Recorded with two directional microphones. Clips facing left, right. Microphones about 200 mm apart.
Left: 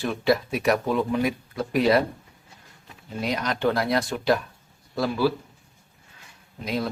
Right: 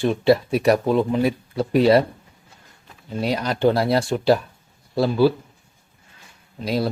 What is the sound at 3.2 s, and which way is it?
Speech, 30° right (ahead or behind).